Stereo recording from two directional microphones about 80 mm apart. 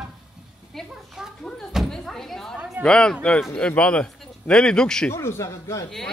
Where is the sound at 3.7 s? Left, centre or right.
Centre.